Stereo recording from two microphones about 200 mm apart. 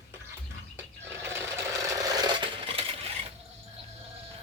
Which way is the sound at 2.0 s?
20° right (ahead or behind).